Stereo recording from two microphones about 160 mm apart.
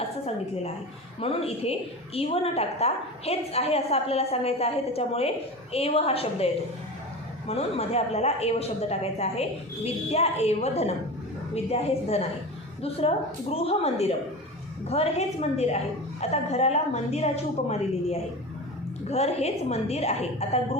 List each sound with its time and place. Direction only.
1.2 s a woman's voice: 40° left (ahead or behind)